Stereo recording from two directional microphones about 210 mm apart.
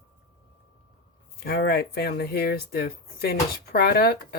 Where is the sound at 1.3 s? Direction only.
50° left (ahead or behind).